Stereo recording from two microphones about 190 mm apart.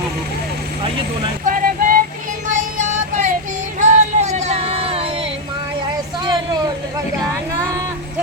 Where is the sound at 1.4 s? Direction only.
45° right (ahead or behind).